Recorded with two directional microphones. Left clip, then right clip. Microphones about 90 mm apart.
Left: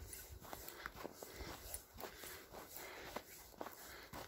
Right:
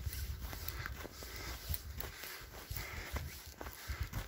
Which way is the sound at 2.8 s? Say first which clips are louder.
Right 4 dB; 20° left (ahead or behind).